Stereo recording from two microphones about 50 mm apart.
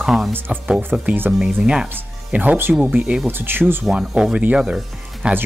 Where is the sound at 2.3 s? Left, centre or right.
Right.